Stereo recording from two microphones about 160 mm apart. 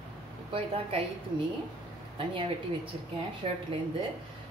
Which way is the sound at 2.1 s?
35° right (ahead or behind).